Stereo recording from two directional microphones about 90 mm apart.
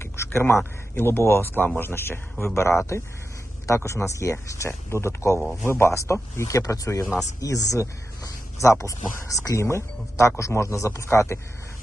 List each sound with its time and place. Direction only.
0.0 s a man's voice: 30° left (ahead or behind)